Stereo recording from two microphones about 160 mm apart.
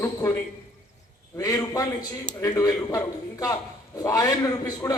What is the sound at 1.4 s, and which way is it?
A man's voice, 20° left (ahead or behind).